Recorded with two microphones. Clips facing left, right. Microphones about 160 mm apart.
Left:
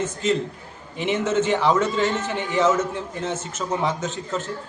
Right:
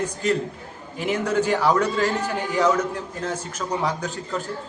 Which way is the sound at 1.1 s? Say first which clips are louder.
Left 1 dB; 25° left (ahead or behind).